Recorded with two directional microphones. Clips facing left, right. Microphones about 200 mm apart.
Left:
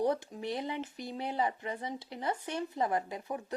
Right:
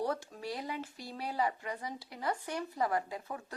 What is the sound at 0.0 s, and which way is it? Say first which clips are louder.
Speech: left 4 dB; 20° left (ahead or behind).